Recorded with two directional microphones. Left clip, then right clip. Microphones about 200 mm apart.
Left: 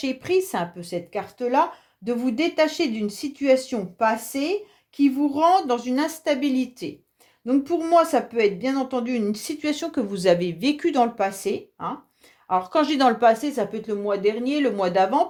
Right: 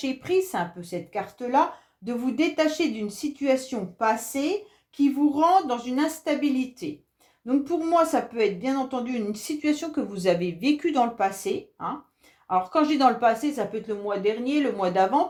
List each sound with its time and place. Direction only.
0.0 s speech: 40° left (ahead or behind)